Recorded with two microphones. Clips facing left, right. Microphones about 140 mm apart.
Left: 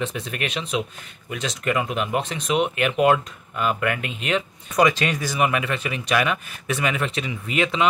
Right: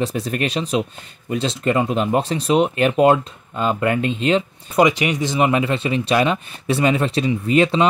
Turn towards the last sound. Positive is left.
turn(degrees=-35)  # may be behind; listen again after turning